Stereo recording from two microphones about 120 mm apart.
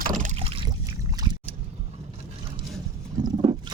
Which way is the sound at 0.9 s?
30° right (ahead or behind).